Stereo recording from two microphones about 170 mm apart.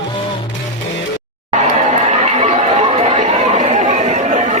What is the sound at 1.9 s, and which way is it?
Chatter, 40° right (ahead or behind).